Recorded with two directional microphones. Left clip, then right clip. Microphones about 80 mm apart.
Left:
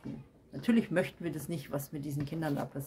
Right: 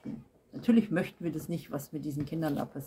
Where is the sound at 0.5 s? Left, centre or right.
Left.